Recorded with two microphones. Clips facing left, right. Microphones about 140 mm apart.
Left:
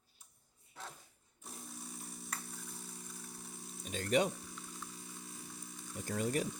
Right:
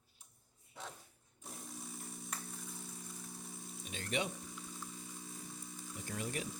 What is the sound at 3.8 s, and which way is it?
Frying, 40° left (ahead or behind).